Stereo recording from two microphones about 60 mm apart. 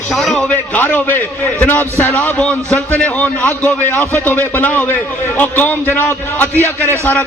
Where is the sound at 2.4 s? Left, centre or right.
Centre; by 7.1 s left.